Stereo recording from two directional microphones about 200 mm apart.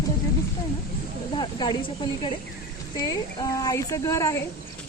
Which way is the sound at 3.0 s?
20° left (ahead or behind).